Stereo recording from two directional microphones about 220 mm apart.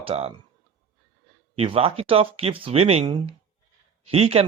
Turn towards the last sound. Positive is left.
turn(degrees=-25)  # may be behind; listen again after turning